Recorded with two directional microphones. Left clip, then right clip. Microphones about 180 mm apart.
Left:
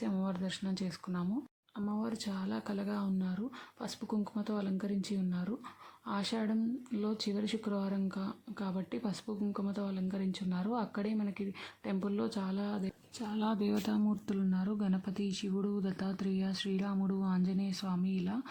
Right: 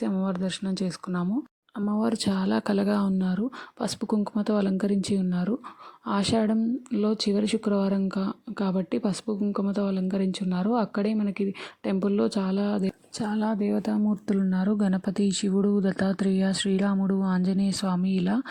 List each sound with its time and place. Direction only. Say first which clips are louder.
0.0 s speech: right 9 dB; 35° right (ahead or behind)